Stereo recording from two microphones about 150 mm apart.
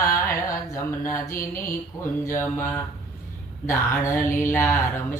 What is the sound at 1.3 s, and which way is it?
Mantra, 70° left (ahead or behind).